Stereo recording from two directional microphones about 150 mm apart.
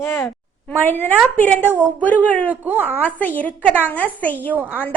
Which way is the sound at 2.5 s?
10° right (ahead or behind).